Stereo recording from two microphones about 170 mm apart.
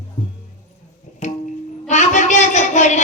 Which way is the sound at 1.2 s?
45° left (ahead or behind).